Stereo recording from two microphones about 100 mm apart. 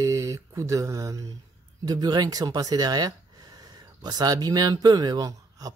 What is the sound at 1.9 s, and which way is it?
Speech, 40° right (ahead or behind).